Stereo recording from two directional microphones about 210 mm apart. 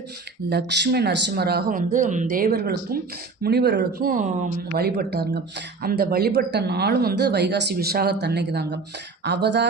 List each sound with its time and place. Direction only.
0.5 s speech: 55° right (ahead or behind); by 4.8 s 35° right (ahead or behind)
4.8 s speech: 50° right (ahead or behind)